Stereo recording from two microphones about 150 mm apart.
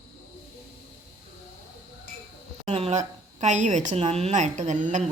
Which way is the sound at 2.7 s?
45° right (ahead or behind).